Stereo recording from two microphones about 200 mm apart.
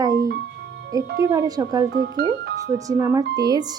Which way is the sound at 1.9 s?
55° right (ahead or behind).